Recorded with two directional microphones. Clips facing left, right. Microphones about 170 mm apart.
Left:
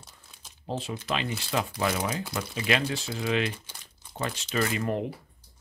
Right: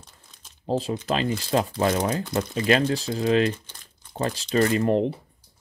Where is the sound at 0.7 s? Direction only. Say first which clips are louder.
Right 7 dB; 35° right (ahead or behind).